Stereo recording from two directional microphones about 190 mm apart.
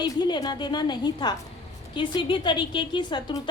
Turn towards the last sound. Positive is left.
turn(degrees=25)  # may be behind; listen again after turning